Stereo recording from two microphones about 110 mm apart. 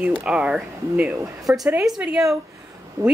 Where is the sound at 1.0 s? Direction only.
25° right (ahead or behind).